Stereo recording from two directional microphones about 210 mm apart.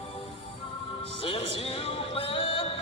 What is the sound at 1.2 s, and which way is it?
Music, 25° left (ahead or behind).